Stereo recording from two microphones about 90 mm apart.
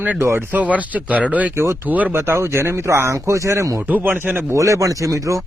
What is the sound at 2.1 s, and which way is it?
Speech, 30° right (ahead or behind).